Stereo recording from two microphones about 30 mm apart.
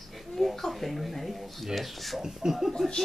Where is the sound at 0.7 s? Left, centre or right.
Centre.